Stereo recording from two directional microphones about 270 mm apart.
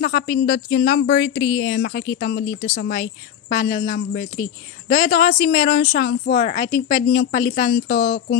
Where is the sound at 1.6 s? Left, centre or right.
Left.